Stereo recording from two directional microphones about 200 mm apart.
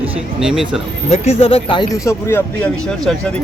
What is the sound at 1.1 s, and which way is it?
Speech, 30° left (ahead or behind).